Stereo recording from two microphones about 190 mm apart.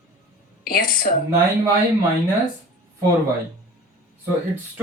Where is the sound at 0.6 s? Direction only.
50° left (ahead or behind).